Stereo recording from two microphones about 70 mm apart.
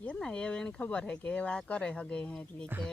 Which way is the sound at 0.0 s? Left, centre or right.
Centre.